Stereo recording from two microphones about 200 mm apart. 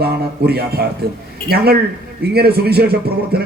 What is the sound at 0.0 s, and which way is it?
A man's voice, 50° right (ahead or behind).